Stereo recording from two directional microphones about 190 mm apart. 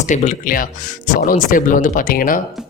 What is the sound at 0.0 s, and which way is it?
Speech, 40° left (ahead or behind).